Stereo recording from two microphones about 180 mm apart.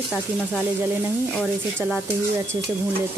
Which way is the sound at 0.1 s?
10° right (ahead or behind).